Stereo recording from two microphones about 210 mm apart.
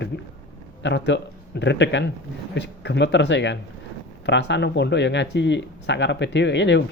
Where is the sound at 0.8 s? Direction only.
55° left (ahead or behind).